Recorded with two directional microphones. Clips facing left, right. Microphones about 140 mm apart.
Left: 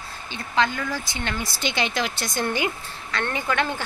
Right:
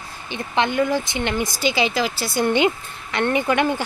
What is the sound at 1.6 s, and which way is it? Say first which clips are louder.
Speech: right 4 dB; 5° right (ahead or behind).